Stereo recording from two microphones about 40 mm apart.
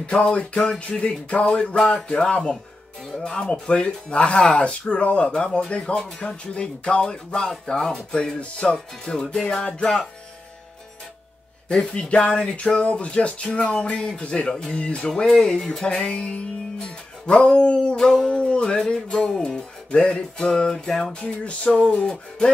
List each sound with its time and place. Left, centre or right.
0.0 s speech: left
5.9 s music: centre
6.2 s speech: left
8.7 s music: centre
11.7 s speech: centre
15.2 s music: centre
15.8 s speech: centre
17.9 s music: centre
18.3 s speech: left
18.8 s music: centre
21.1 s speech: left